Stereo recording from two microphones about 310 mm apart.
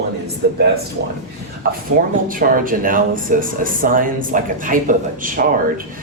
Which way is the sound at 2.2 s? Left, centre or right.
Right.